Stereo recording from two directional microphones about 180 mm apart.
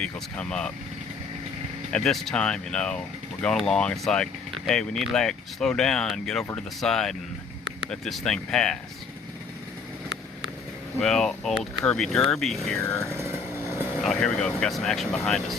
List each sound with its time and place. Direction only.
0.0 s speech: 5° left (ahead or behind)
1.9 s speech: 5° left (ahead or behind)
11.0 s speech: centre (ahead or behind)
13.1 s vehicle: 15° right (ahead or behind)
14.0 s speech: centre (ahead or behind)